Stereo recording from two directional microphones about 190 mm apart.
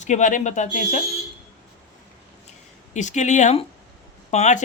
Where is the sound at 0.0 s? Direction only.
40° left (ahead or behind).